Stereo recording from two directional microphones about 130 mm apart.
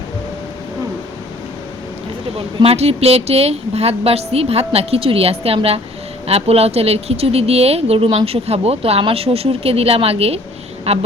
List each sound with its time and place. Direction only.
2.6 s speech: 50° right (ahead or behind)